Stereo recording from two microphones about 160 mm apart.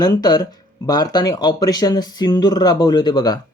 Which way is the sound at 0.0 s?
25° left (ahead or behind).